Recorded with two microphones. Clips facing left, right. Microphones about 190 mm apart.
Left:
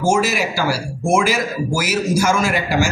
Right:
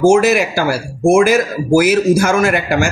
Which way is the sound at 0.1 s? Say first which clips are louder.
Right 7 dB; 60° right (ahead or behind).